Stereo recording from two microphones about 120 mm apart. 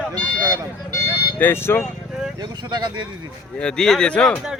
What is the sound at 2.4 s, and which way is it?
Speech, 35° right (ahead or behind).